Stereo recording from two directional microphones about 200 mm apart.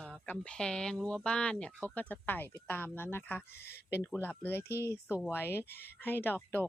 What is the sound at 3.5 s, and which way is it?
Speech, 55° left (ahead or behind).